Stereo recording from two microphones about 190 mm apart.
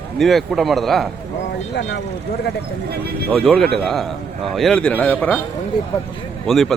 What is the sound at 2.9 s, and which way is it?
Speech, 55° right (ahead or behind).